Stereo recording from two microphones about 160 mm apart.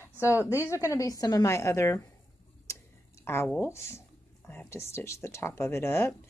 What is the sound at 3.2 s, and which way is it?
Speech, 15° left (ahead or behind).